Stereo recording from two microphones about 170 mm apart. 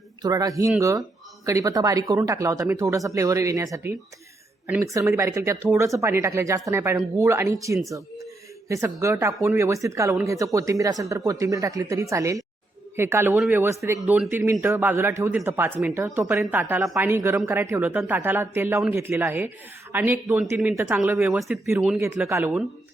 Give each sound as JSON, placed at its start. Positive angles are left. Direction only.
{"t": 0.2, "sound": "speech", "side_deg": -20}
{"t": 21.3, "sound": "speech", "side_deg": 0}
{"t": 22.0, "sound": "speech", "side_deg": -15}